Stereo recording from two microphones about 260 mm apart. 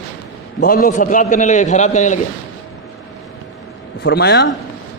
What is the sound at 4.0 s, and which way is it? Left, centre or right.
Speech, left.